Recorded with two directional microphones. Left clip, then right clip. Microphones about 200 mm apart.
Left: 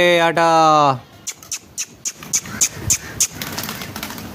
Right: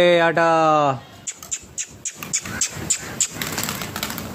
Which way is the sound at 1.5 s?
25° left (ahead or behind).